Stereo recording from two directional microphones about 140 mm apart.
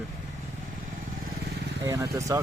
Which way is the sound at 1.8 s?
25° right (ahead or behind).